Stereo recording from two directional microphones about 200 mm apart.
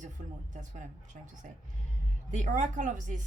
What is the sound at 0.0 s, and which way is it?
A woman's voice, 40° right (ahead or behind).